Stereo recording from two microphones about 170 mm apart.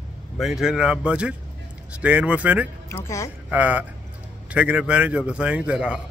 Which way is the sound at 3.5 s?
10° right (ahead or behind).